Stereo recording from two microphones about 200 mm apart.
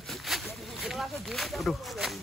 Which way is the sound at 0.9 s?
Centre (ahead or behind).